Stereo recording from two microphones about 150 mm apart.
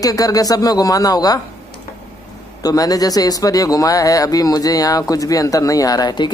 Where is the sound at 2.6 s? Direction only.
25° left (ahead or behind).